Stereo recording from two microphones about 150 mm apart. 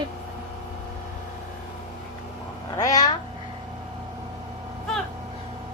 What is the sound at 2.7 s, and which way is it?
Speech, 25° left (ahead or behind).